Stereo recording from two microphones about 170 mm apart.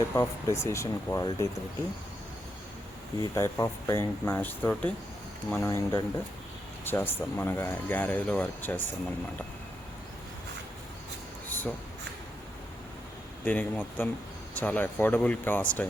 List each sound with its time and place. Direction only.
0.1 s speech: 15° left (ahead or behind)
3.2 s speech: 15° left (ahead or behind)
13.4 s speech: 10° left (ahead or behind)